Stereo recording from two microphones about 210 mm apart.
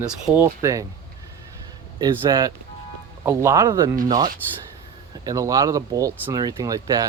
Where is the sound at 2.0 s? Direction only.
20° right (ahead or behind).